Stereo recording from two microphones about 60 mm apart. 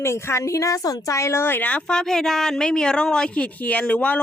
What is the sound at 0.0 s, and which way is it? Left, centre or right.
Speech, left.